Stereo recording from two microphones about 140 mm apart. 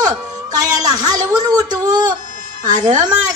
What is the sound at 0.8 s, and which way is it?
Speech, 30° right (ahead or behind).